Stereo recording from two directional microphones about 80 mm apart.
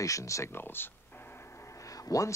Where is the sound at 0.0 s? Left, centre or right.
Left.